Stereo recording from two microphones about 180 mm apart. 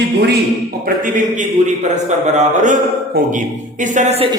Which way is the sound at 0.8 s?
50° right (ahead or behind).